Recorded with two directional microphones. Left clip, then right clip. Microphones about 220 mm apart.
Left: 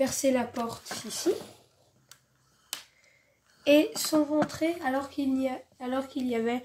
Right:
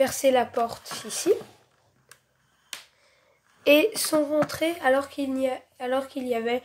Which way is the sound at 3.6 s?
25° right (ahead or behind).